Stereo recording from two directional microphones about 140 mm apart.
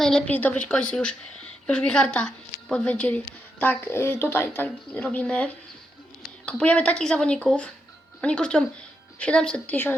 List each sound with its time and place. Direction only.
0.0 s speech: 5° left (ahead or behind)